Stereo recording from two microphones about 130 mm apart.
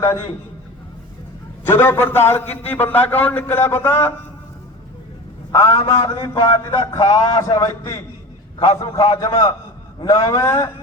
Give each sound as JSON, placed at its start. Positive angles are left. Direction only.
{"t": 0.0, "sound": "a man's voice", "side_deg": 20}
{"t": 1.6, "sound": "a man's voice", "side_deg": 15}
{"t": 5.5, "sound": "a man's voice", "side_deg": 20}
{"t": 9.1, "sound": "a man's voice", "side_deg": 25}